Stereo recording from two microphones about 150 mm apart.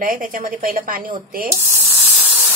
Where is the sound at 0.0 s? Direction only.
65° right (ahead or behind).